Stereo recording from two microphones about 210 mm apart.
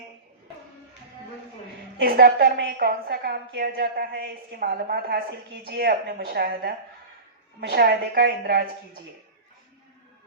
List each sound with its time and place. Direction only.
2.0 s a woman's voice: 45° right (ahead or behind)